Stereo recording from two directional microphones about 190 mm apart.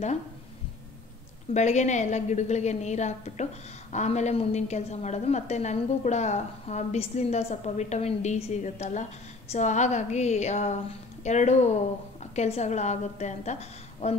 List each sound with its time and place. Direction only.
1.5 s a woman's voice: 40° left (ahead or behind)